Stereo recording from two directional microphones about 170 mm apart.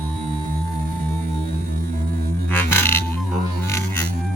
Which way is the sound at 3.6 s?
15° left (ahead or behind).